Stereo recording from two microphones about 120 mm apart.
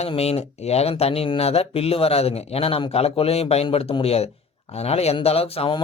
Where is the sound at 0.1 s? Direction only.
55° left (ahead or behind).